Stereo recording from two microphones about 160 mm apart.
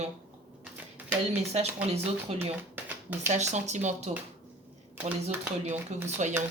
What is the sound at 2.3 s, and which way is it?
Speech, 40° right (ahead or behind).